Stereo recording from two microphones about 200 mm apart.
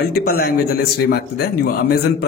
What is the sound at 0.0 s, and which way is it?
A man's voice, 50° left (ahead or behind).